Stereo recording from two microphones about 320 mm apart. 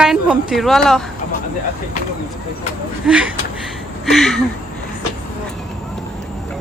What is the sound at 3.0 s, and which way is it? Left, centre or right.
Speech, centre.